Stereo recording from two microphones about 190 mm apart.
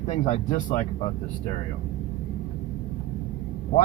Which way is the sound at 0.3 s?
35° left (ahead or behind).